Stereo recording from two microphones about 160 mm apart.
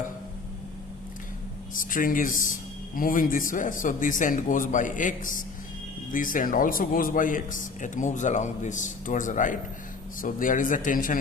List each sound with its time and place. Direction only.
1.7 s speech: 55° left (ahead or behind)